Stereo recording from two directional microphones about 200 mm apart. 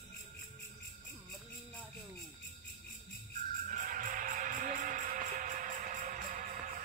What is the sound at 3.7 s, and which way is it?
Music, 40° right (ahead or behind).